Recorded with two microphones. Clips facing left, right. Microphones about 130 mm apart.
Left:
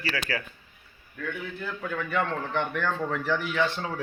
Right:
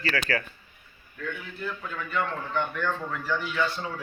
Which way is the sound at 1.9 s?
60° left (ahead or behind).